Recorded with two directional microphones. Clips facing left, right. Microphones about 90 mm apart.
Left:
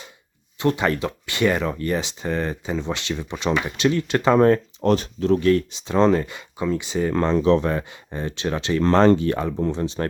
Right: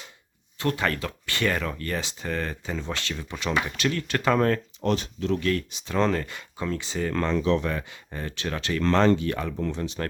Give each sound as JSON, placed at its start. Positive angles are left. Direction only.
{"t": 0.6, "sound": "speech", "side_deg": 20}
{"t": 4.8, "sound": "speech", "side_deg": 40}
{"t": 7.3, "sound": "speech", "side_deg": 35}